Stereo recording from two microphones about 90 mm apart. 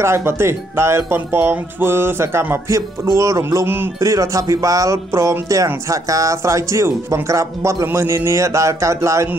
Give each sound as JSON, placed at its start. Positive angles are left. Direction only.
{"t": 0.0, "sound": "speech", "side_deg": -30}
{"t": 4.0, "sound": "speech", "side_deg": -35}